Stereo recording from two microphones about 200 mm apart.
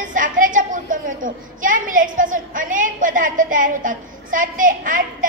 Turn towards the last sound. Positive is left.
turn(degrees=-40)  # may be behind; listen again after turning